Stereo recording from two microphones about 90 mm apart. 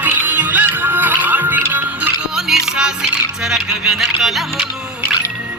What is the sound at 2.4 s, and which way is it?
Music, 5° right (ahead or behind).